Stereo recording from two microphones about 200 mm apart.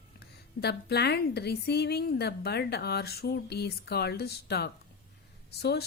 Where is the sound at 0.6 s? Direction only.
55° left (ahead or behind).